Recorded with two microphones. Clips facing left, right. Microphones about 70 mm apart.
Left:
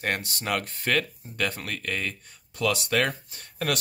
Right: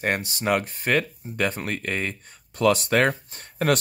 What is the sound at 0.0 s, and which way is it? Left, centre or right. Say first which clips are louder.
Speech: right 4 dB; centre.